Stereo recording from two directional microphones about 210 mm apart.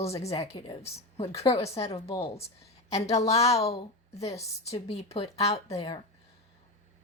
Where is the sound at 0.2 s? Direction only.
30° left (ahead or behind).